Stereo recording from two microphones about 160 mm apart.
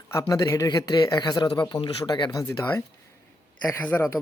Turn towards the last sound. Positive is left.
turn(degrees=15)  # may be behind; listen again after turning